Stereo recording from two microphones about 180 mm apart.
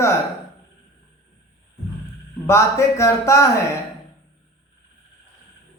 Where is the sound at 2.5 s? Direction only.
15° left (ahead or behind).